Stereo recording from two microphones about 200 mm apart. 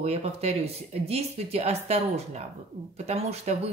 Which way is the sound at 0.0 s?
30° right (ahead or behind).